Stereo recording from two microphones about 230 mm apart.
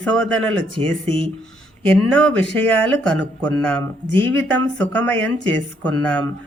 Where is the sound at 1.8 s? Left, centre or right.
Centre.